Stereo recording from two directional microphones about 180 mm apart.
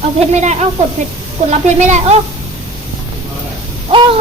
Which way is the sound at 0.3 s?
40° right (ahead or behind).